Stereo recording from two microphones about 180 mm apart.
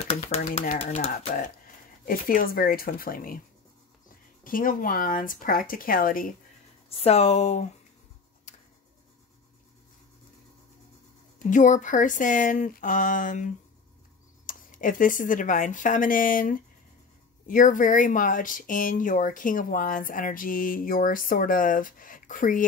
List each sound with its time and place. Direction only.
0.1 s speech: 40° left (ahead or behind)
0.9 s speech: 35° left (ahead or behind)
2.0 s speech: 50° left (ahead or behind)
4.5 s speech: 50° left (ahead or behind)
6.9 s speech: 35° left (ahead or behind)
11.3 s speech: 45° left (ahead or behind)